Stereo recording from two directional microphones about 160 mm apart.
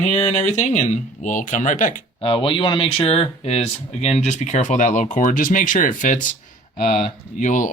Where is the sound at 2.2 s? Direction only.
35° left (ahead or behind); by 7.7 s 50° left (ahead or behind).